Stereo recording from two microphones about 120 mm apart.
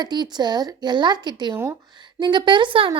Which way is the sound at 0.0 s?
35° right (ahead or behind).